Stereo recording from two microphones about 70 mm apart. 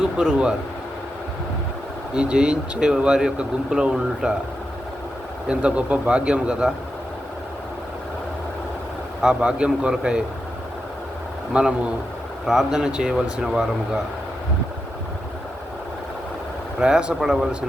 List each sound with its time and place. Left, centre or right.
0.2 s speech: centre
2.1 s speech: centre
5.5 s speech: centre
9.2 s speech: centre
12.5 s speech: centre
16.8 s speech: centre